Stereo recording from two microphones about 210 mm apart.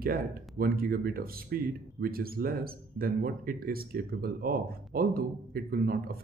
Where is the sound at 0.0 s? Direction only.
45° right (ahead or behind).